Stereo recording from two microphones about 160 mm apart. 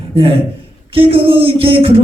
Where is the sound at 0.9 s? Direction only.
35° right (ahead or behind).